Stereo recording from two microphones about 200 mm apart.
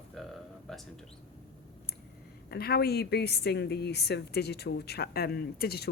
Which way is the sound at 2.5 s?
50° left (ahead or behind).